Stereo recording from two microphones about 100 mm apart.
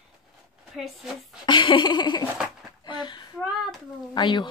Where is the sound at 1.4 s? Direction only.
55° left (ahead or behind).